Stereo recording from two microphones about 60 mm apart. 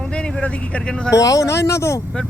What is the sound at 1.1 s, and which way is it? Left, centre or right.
Speech, left.